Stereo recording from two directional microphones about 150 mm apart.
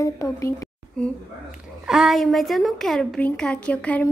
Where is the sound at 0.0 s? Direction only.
20° left (ahead or behind).